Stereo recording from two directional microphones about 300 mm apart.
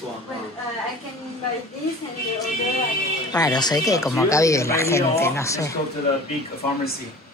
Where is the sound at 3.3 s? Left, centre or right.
Centre.